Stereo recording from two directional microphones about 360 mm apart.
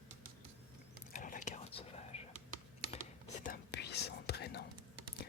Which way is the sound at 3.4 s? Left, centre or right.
Left.